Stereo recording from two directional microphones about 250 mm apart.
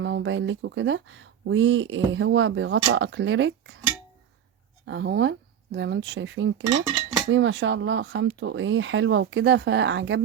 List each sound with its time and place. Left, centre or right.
0.0 s speech: right
4.9 s speech: right